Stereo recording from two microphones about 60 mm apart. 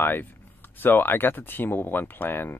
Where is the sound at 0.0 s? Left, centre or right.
Left.